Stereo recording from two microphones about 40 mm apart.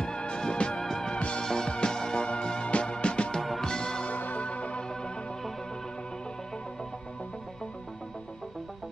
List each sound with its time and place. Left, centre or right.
0.0 s music: left
0.8 s music: centre
1.1 s music: left
4.1 s music: left